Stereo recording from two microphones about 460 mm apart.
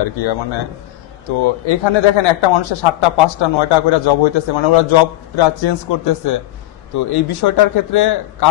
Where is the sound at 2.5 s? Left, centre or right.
Left.